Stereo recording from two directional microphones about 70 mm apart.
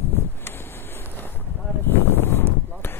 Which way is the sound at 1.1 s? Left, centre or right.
Left.